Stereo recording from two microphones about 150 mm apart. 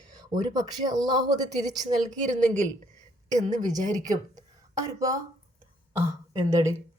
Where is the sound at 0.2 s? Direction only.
25° right (ahead or behind).